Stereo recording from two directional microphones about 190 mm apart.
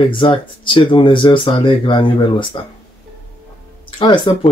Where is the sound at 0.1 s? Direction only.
25° left (ahead or behind).